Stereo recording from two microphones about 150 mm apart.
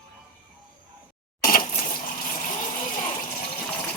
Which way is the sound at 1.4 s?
70° left (ahead or behind).